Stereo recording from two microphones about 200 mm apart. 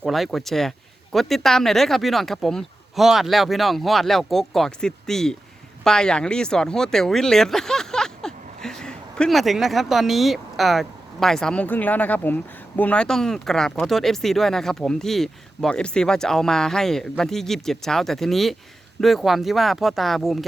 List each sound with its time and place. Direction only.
0.0 s speech: centre (ahead or behind)